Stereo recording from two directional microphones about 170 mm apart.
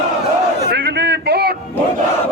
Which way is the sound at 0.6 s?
85° right.